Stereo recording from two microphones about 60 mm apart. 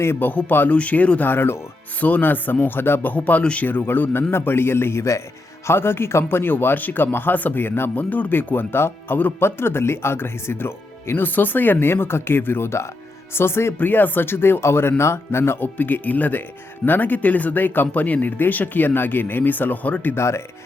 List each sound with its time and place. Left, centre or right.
0.0 s speech: left
0.3 s speech: left
1.3 s speech: left
2.0 s speech: left
3.7 s speech: left
5.6 s speech: left
13.7 s speech: left
20.1 s speech: left